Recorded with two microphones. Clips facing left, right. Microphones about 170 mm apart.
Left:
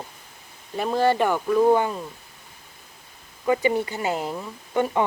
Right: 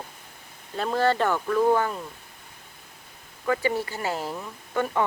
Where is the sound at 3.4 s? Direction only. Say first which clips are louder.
Left 4 dB; 15° left (ahead or behind).